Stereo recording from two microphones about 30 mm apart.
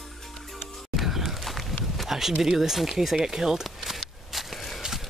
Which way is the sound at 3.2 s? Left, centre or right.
Centre.